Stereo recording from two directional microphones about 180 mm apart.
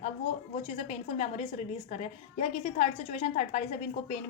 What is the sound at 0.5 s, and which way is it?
A woman's voice, 40° left (ahead or behind).